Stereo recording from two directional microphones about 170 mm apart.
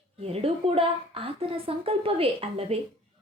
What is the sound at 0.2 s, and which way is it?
Speech, 35° right (ahead or behind).